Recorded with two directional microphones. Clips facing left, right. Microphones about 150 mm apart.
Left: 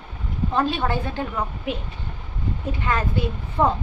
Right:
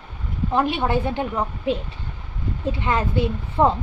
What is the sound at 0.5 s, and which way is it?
A woman's voice, 20° right (ahead or behind).